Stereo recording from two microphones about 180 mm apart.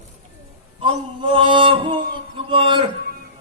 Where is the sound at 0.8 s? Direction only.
30° right (ahead or behind).